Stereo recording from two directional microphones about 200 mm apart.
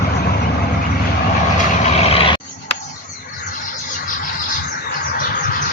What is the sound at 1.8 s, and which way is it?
Vehicle, 30° left (ahead or behind).